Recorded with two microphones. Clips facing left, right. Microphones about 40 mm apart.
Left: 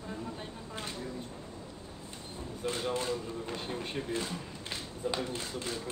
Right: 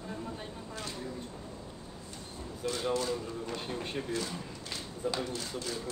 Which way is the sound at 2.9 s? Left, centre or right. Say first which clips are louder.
Right 1 dB; left.